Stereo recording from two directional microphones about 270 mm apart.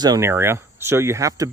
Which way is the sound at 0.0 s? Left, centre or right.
Centre.